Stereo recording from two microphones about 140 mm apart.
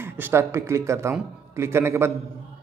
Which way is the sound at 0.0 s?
15° right (ahead or behind).